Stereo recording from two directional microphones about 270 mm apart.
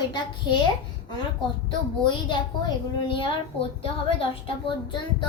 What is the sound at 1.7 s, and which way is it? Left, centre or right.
A woman's voice, centre.